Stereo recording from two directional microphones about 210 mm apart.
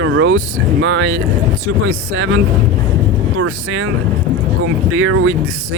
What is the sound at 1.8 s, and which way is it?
Speech, 75° right (ahead or behind).